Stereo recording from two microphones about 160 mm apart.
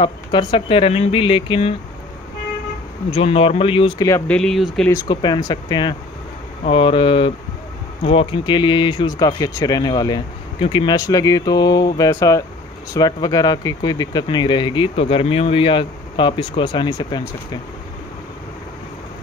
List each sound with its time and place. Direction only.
0.0 s speech: 30° left (ahead or behind)
3.1 s speech: 35° left (ahead or behind)
4.3 s speech: 5° left (ahead or behind)
5.0 s speech: 25° left (ahead or behind)